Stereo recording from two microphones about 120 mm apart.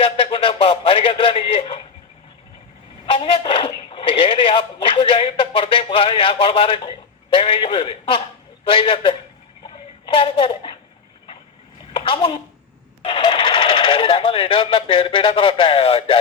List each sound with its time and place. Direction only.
0.0 s speech: 50° left (ahead or behind)
3.1 s speech: 45° left (ahead or behind)
9.6 s a sound: 45° left (ahead or behind)
11.9 s a child's voice: 45° left (ahead or behind)